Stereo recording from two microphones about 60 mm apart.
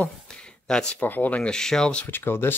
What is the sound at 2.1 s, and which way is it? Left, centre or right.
Speech, left.